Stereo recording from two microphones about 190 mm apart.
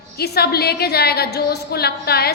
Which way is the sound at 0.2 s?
55° left (ahead or behind).